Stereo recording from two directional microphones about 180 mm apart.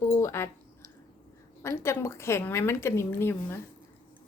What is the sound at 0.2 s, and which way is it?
Speech, 15° left (ahead or behind).